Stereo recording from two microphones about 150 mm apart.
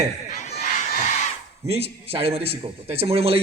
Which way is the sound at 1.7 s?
40° right (ahead or behind).